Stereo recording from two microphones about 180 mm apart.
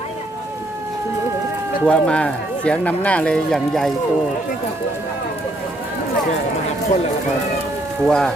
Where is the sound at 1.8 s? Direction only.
5° left (ahead or behind).